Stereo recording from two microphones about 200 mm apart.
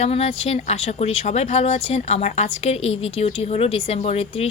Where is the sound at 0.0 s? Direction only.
30° left (ahead or behind).